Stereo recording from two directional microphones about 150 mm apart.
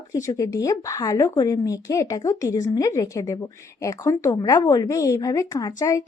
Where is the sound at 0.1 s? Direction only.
20° left (ahead or behind).